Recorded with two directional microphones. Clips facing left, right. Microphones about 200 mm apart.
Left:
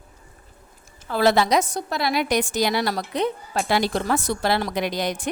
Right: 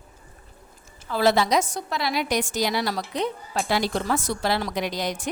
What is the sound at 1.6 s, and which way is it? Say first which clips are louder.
A woman's voice: left 3 dB; 40° left (ahead or behind).